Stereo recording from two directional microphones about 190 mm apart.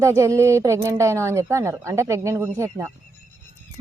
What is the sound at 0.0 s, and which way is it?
Speech, 15° right (ahead or behind).